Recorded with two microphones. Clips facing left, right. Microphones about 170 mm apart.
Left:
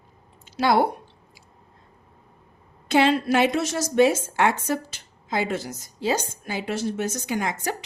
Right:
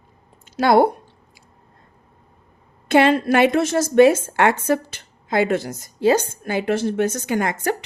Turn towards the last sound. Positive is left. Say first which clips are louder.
# right 5 dB
turn(degrees=-55)  # may be behind; listen again after turning